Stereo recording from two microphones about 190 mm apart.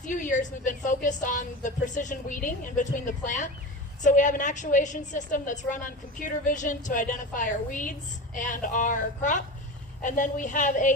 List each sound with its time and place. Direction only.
0.0 s a woman's voice: 40° left (ahead or behind)